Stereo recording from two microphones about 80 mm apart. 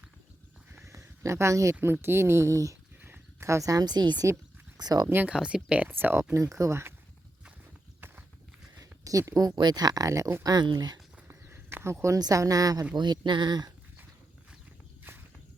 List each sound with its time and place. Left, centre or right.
0.7 s a sound: right
1.8 s speech: right
3.0 s speech: right
5.0 s speech: centre
5.9 s speech: right
6.3 s speech: right
8.8 s a sound: right
9.6 s speech: right
10.4 s speech: right
11.3 s a sound: right
12.2 s speech: right
12.9 s speech: right